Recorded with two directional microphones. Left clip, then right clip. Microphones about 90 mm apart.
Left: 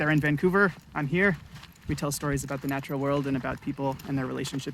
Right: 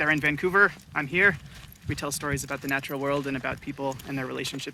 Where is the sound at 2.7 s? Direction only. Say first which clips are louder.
Right 2 dB; 30° right (ahead or behind).